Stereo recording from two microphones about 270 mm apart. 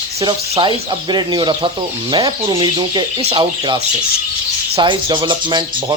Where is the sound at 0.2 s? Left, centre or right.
Centre.